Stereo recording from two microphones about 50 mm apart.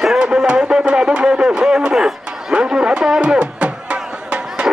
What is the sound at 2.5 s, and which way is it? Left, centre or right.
Music, centre.